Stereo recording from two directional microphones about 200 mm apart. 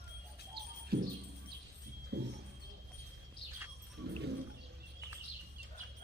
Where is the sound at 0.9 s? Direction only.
50° right (ahead or behind).